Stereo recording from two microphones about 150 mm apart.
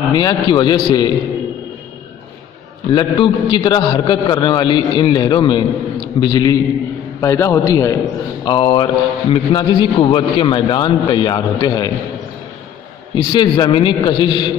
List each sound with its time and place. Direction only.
0.1 s a man's voice: 25° left (ahead or behind)
2.9 s a man's voice: 30° left (ahead or behind)
8.5 s a man's voice: 35° left (ahead or behind)
13.1 s a man's voice: 30° left (ahead or behind)